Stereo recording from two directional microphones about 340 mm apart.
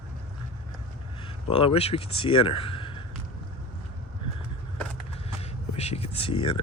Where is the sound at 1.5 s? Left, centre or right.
Centre.